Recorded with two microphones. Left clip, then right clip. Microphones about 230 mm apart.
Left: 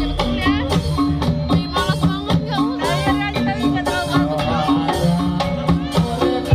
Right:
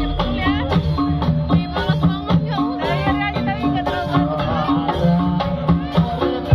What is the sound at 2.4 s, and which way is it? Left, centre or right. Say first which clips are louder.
Music: left 2 dB; centre.